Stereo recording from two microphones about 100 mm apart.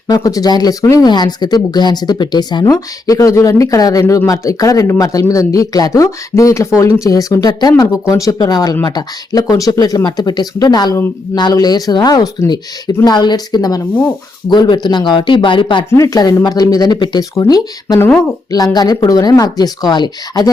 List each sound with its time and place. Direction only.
0.1 s speech: 35° left (ahead or behind)
2.6 s speech: 35° left (ahead or behind)
8.4 s speech: 45° left (ahead or behind)
15.9 s speech: 35° left (ahead or behind)
18.0 s speech: 25° left (ahead or behind)
18.5 s speech: 40° left (ahead or behind)